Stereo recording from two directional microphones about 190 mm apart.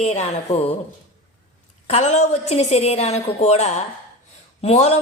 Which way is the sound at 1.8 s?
35° left (ahead or behind).